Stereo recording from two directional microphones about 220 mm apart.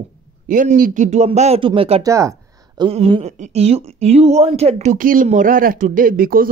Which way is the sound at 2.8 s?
25° right (ahead or behind).